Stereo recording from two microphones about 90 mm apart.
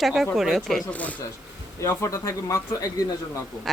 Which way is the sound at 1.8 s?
35° left (ahead or behind).